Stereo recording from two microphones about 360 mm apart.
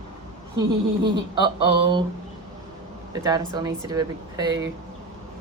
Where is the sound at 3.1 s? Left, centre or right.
Centre.